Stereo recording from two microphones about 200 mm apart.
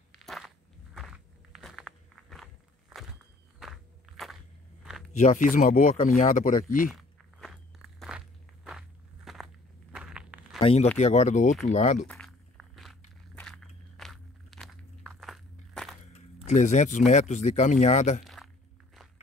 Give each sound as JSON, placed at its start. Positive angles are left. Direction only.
{"t": 0.2, "sound": "walk", "side_deg": 0}
{"t": 4.8, "sound": "a sound", "side_deg": 0}
{"t": 5.2, "sound": "speech", "side_deg": 40}
{"t": 6.9, "sound": "walk", "side_deg": 0}
{"t": 10.6, "sound": "speech", "side_deg": 30}
{"t": 12.1, "sound": "walk", "side_deg": 0}
{"t": 16.4, "sound": "speech", "side_deg": 35}
{"t": 18.2, "sound": "a sound", "side_deg": 0}